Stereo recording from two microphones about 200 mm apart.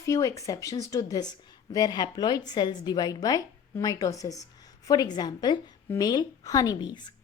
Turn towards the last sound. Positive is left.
turn(degrees=20)  # may be behind; listen again after turning